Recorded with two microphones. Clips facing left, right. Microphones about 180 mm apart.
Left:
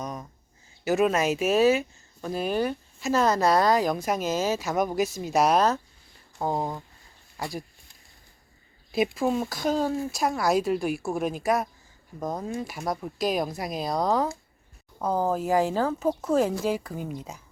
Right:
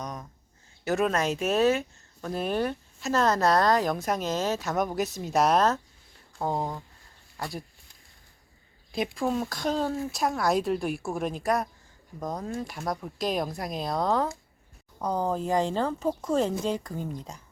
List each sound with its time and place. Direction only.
0.0 s a sound: 5° left (ahead or behind)
0.9 s speech: 5° left (ahead or behind)
8.9 s speech: 5° left (ahead or behind)